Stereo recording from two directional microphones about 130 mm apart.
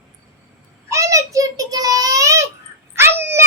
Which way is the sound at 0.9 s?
25° right (ahead or behind).